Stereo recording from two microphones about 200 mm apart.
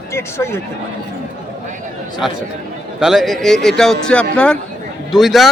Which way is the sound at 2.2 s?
Centre (ahead or behind).